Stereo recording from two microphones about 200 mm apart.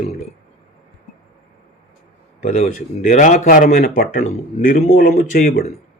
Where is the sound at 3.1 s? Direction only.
40° left (ahead or behind).